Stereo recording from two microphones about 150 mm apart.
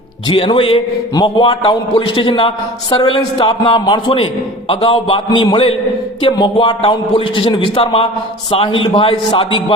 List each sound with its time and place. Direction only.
0.3 s a man's voice: 35° left (ahead or behind)